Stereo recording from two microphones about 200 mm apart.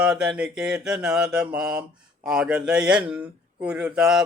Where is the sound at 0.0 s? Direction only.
5° right (ahead or behind).